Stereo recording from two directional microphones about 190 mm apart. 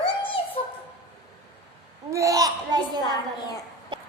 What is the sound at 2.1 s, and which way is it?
Speech, 15° right (ahead or behind).